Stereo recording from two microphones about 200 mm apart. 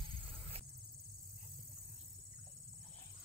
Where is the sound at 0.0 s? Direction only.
25° right (ahead or behind).